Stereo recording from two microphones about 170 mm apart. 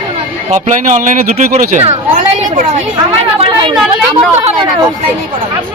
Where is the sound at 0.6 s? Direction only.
45° right (ahead or behind).